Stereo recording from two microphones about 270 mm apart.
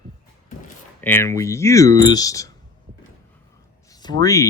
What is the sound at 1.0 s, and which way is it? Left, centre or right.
Speech, centre.